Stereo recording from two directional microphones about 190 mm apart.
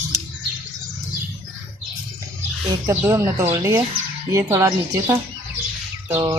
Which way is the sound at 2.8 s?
15° right (ahead or behind).